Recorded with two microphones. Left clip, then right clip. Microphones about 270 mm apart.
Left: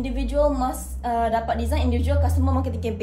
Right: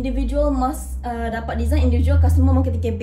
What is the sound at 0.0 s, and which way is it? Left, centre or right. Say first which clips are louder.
A woman's voice: even; centre.